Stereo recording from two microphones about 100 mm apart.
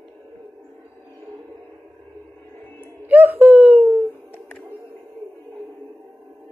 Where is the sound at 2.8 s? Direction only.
20° right (ahead or behind).